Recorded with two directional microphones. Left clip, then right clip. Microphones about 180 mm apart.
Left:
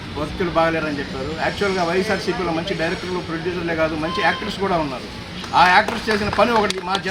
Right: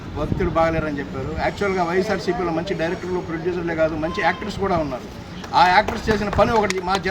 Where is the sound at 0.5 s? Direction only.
25° right (ahead or behind).